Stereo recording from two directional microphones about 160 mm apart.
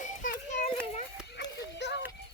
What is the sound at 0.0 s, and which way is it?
Children playing, 50° left (ahead or behind).